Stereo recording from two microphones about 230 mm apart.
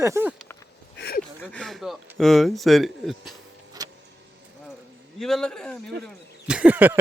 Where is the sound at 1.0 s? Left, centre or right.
Left.